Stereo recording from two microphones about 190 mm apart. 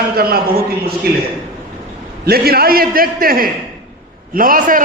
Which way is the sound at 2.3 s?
55° right (ahead or behind).